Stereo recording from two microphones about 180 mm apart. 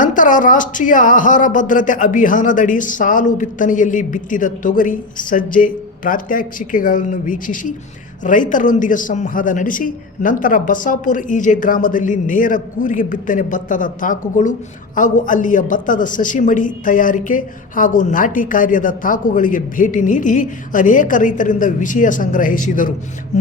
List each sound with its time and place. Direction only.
0.0 s a man's voice: 45° left (ahead or behind)